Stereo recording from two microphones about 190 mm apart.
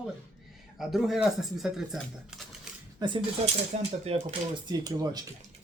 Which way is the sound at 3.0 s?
20° right (ahead or behind).